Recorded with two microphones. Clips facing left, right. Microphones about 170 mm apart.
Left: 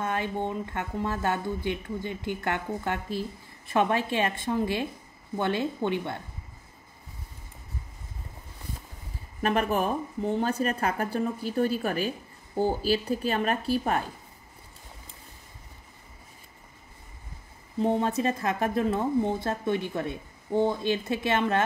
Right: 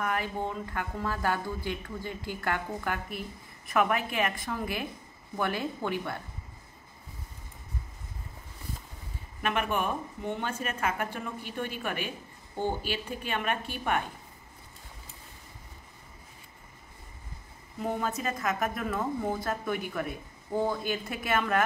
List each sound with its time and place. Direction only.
0.0 s speech: 25° left (ahead or behind)
9.4 s a woman's voice: 35° left (ahead or behind)
17.7 s speech: 30° left (ahead or behind)